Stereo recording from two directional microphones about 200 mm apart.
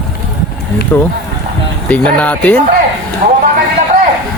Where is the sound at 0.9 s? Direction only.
10° left (ahead or behind).